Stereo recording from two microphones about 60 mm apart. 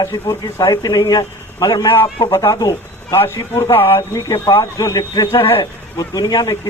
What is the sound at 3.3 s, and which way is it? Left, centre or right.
Speech, left.